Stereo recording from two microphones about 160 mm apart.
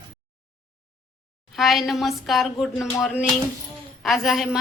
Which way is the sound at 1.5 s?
Centre (ahead or behind).